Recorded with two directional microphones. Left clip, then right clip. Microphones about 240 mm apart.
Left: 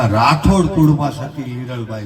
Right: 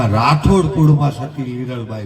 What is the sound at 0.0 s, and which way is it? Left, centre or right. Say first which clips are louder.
A man's voice: left 2 dB; right.